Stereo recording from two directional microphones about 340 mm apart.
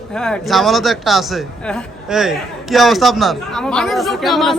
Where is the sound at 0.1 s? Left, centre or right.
Centre.